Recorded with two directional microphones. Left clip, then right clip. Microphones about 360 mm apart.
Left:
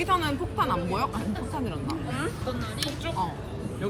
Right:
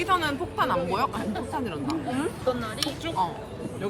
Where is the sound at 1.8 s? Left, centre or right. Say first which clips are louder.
Right 3 dB; right.